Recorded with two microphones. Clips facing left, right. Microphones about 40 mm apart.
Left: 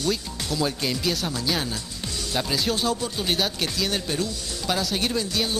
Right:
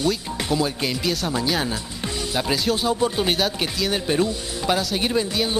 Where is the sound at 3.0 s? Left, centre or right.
Right.